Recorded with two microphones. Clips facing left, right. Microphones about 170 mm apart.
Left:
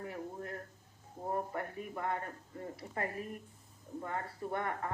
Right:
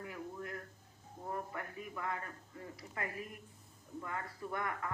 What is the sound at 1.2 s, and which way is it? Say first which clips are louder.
Speech: left 5 dB; 35° left (ahead or behind).